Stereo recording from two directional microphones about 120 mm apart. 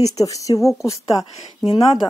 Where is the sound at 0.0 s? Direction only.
30° left (ahead or behind).